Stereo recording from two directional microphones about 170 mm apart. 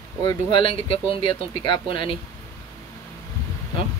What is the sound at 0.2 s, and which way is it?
Speech, 25° left (ahead or behind).